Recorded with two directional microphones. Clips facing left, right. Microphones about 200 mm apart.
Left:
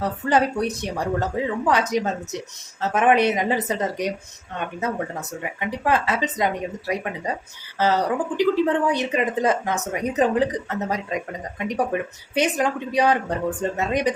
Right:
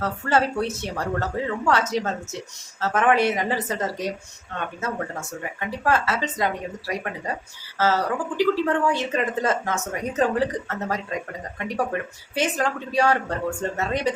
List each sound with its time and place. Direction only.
0.0 s a woman's voice: 15° left (ahead or behind)
5.4 s a woman's voice: 15° left (ahead or behind)